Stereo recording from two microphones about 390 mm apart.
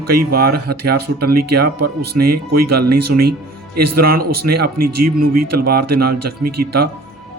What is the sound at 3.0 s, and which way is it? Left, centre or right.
A man's voice, right.